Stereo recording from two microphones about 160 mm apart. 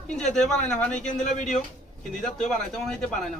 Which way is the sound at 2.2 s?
5° left (ahead or behind).